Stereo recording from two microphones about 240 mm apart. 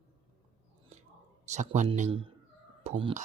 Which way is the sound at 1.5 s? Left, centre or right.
Right.